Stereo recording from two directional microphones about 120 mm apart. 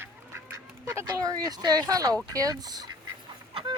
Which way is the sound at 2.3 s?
30° right (ahead or behind).